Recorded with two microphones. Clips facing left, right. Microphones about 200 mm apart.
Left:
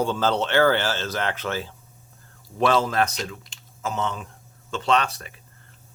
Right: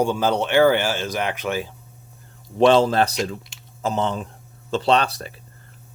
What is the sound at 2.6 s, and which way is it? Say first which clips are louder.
Speech: right 6 dB; 30° right (ahead or behind).